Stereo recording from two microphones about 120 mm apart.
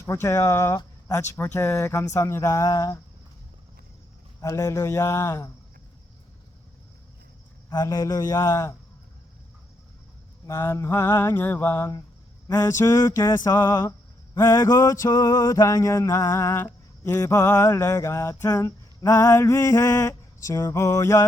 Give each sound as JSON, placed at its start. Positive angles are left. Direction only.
{"t": 0.0, "sound": "male singing", "side_deg": 25}
{"t": 4.4, "sound": "male singing", "side_deg": 25}
{"t": 7.7, "sound": "male singing", "side_deg": 30}
{"t": 10.4, "sound": "male singing", "side_deg": 25}
{"t": 11.3, "sound": "mantra", "side_deg": 15}
{"t": 12.5, "sound": "male singing", "side_deg": 25}